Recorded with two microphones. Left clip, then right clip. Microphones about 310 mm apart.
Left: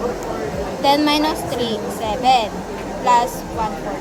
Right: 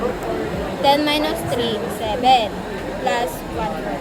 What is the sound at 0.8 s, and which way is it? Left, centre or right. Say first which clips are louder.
Speech: left 1 dB; centre.